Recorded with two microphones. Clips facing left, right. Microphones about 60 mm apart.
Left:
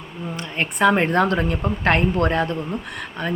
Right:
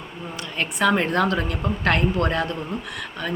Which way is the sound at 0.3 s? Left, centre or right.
Left.